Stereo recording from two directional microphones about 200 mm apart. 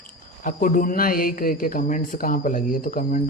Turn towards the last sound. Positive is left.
turn(degrees=45)  # may be behind; listen again after turning